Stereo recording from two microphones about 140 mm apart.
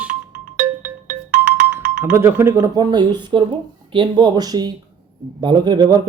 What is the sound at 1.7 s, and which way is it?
Speech, 15° right (ahead or behind).